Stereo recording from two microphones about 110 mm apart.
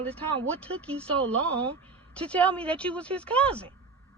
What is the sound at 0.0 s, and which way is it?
Speech, 10° left (ahead or behind).